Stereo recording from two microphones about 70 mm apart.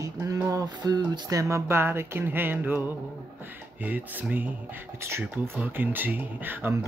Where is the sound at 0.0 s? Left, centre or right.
Right.